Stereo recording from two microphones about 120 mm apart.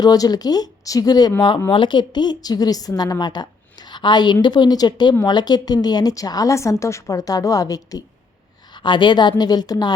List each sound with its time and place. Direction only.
0.0 s a woman's voice: 30° left (ahead or behind)
8.7 s a woman's voice: 40° left (ahead or behind)